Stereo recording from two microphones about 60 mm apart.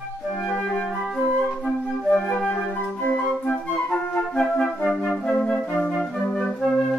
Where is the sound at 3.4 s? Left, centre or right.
Centre.